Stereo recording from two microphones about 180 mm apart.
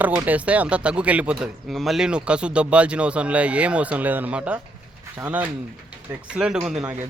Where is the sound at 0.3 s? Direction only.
5° right (ahead or behind).